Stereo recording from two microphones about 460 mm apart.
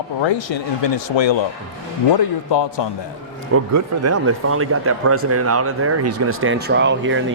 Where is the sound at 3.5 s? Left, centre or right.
Right.